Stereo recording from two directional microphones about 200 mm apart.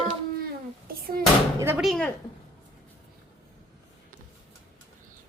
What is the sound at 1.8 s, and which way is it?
Speech, 5° left (ahead or behind).